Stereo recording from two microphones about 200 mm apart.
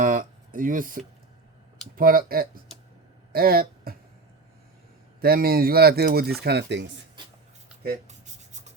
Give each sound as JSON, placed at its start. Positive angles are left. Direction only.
{"t": 0.0, "sound": "a sound", "side_deg": -40}
{"t": 2.0, "sound": "speech", "side_deg": -45}
{"t": 5.2, "sound": "speech", "side_deg": -50}